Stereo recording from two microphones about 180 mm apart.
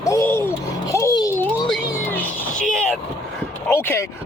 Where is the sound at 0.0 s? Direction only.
15° left (ahead or behind).